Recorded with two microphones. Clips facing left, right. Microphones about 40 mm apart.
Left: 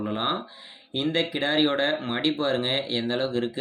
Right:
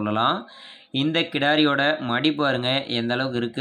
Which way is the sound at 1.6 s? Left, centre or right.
Right.